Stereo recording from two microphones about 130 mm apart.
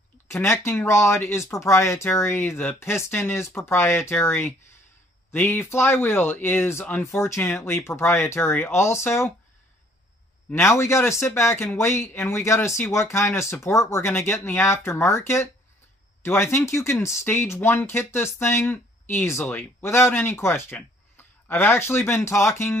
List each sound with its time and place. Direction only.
0.3 s speech: 20° left (ahead or behind)
10.5 s speech: 20° left (ahead or behind)